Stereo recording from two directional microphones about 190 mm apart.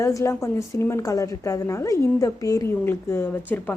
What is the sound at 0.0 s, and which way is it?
A woman's voice, 15° left (ahead or behind).